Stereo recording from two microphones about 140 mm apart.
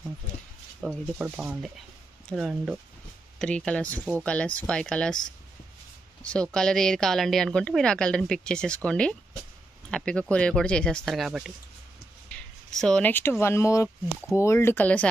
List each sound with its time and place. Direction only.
1.1 s a woman's voice: 10° right (ahead or behind)
3.3 s speech: 5° left (ahead or behind)
6.2 s a woman's voice: 10° left (ahead or behind)
12.7 s speech: 5° left (ahead or behind)